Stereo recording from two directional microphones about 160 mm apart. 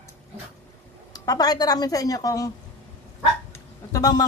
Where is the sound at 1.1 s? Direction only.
25° left (ahead or behind).